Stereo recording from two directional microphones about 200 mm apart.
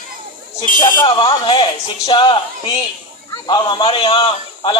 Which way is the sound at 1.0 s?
25° left (ahead or behind).